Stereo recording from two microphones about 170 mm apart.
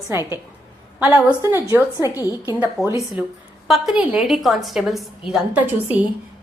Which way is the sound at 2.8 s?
Centre (ahead or behind).